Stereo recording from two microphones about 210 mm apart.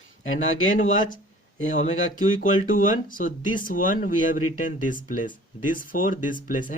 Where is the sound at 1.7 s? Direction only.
40° left (ahead or behind).